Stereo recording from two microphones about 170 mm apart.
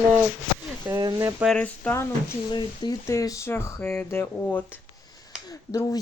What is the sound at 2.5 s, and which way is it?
Speech, 25° left (ahead or behind).